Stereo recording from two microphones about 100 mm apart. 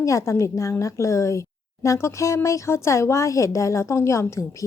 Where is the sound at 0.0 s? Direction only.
30° left (ahead or behind).